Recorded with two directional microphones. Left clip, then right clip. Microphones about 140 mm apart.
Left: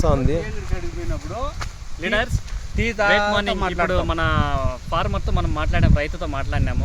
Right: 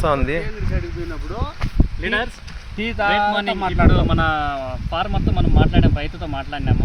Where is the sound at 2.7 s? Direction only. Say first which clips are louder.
Even; 25° left (ahead or behind).